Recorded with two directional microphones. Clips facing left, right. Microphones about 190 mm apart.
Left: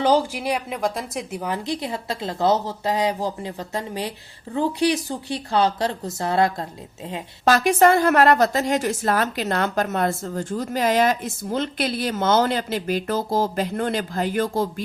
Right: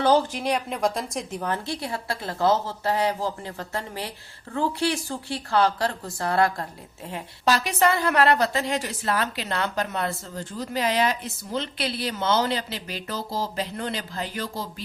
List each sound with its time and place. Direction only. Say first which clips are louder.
0.0 s speech: left 1 dB; 10° left (ahead or behind)
7.4 s a woman's voice: left 6 dB; 50° left (ahead or behind)